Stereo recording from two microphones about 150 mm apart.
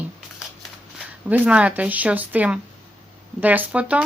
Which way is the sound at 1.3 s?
10° right (ahead or behind).